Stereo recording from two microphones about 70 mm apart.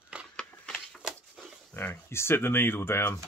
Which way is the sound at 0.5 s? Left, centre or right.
Centre.